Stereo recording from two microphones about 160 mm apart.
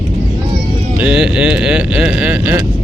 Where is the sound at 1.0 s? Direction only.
5° right (ahead or behind).